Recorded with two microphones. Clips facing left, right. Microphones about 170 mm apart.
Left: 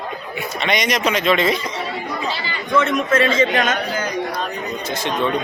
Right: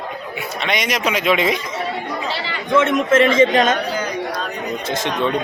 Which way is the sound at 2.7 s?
20° right (ahead or behind).